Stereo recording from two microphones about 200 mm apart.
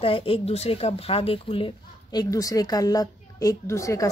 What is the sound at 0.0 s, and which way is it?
Speech, 25° left (ahead or behind).